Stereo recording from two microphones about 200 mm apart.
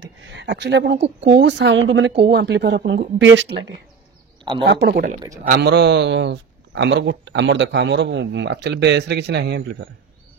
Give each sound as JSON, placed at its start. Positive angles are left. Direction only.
{"t": 0.0, "sound": "a man's voice", "side_deg": -60}
{"t": 4.6, "sound": "a man's voice", "side_deg": -55}